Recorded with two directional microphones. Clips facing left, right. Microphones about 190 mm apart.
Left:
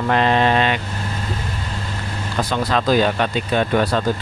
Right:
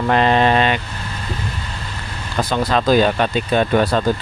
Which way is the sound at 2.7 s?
30° right (ahead or behind).